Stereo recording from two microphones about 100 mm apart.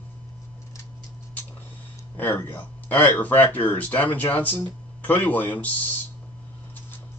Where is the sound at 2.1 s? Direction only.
20° left (ahead or behind).